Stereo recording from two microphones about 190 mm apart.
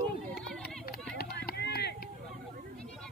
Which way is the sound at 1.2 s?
55° left (ahead or behind).